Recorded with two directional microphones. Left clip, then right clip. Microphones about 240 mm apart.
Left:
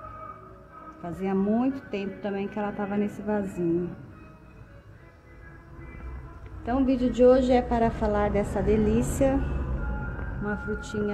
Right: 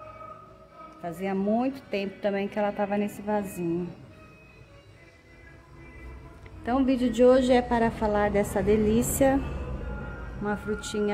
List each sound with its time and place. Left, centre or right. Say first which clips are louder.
1.0 s a woman's voice: left 1 dB; centre
6.6 s a woman's voice: even; right
10.4 s speech: right 2 dB; centre